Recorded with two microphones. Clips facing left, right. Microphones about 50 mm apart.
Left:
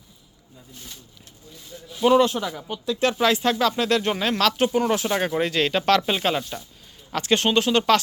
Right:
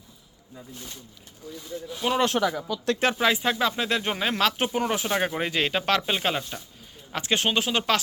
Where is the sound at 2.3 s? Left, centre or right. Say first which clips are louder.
Right 4 dB; right.